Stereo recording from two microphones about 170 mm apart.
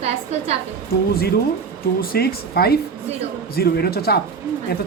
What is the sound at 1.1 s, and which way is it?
Speech, 65° left (ahead or behind).